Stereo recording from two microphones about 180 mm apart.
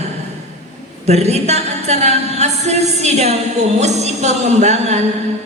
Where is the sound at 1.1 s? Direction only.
35° right (ahead or behind).